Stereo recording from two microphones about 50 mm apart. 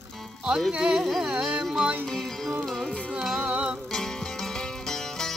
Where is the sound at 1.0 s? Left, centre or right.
Centre.